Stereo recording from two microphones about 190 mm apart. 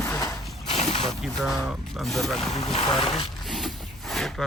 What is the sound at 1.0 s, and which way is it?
Speech, centre (ahead or behind).